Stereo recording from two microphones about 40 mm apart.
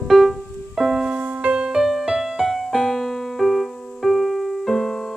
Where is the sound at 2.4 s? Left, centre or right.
Centre.